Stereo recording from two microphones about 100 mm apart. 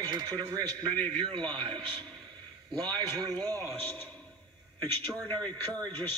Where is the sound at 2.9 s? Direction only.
40° right (ahead or behind).